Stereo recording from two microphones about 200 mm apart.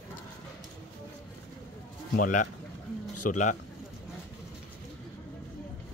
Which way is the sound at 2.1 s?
40° left (ahead or behind).